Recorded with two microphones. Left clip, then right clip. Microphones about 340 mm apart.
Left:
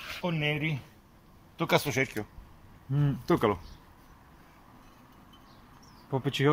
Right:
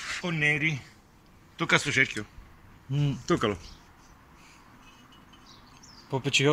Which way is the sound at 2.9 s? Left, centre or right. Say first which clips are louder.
Even; centre.